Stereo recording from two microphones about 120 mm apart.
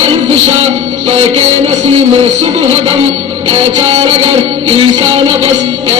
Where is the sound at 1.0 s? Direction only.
60° right (ahead or behind).